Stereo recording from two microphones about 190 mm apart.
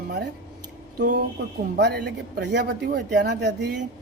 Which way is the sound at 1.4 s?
60° right (ahead or behind).